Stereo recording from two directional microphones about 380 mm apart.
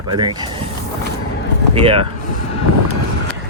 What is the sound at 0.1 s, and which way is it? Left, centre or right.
Speech, centre.